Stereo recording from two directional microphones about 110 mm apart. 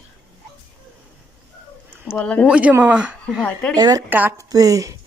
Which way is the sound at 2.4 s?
10° right (ahead or behind).